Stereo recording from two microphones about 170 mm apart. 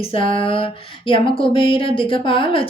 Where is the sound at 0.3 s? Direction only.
30° left (ahead or behind).